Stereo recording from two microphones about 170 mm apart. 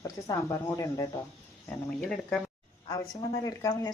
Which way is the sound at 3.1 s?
20° left (ahead or behind).